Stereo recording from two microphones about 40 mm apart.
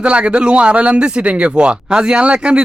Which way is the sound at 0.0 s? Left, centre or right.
Right.